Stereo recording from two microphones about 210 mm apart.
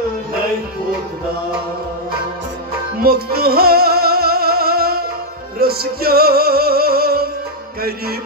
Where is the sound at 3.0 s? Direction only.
45° right (ahead or behind).